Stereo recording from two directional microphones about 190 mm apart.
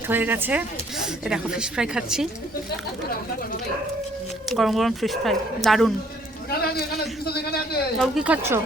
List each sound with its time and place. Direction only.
0.1 s speech: 10° right (ahead or behind)
4.4 s speech: centre (ahead or behind)
6.5 s a man's voice: 55° left (ahead or behind)
7.9 s speech: centre (ahead or behind)